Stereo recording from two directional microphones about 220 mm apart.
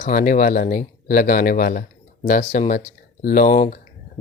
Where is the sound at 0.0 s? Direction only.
40° left (ahead or behind).